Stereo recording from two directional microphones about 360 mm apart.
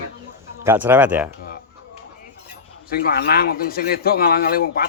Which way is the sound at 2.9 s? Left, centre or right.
Left.